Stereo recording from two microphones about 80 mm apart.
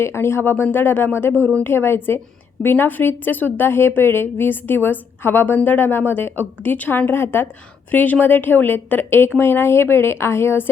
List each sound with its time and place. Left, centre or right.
0.0 s a woman's voice: left